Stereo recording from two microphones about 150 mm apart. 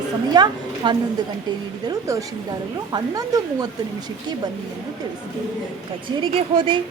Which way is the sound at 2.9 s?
25° right (ahead or behind).